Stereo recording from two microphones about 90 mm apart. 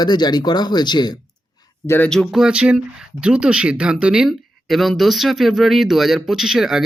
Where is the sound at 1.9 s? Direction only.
20° left (ahead or behind).